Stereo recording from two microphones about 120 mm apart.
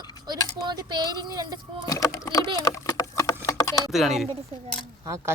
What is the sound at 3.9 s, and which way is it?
Speech, centre (ahead or behind).